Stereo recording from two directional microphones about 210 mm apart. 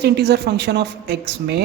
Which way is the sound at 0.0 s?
50° right (ahead or behind).